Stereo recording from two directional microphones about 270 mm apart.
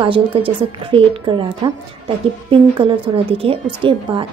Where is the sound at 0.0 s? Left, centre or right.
Centre.